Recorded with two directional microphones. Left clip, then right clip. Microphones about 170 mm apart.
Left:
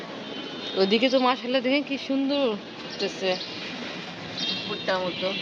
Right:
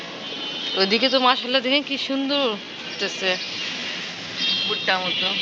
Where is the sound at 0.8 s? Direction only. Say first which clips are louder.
Right 2 dB; 10° left (ahead or behind).